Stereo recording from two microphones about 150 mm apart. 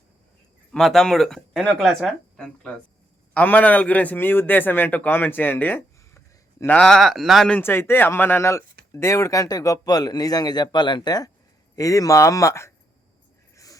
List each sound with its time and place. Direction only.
0.7 s a man's voice: 5° left (ahead or behind); by 12.7 s 20° left (ahead or behind)